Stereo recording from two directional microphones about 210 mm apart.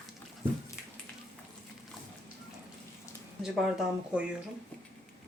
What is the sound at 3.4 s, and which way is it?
Speech, centre (ahead or behind).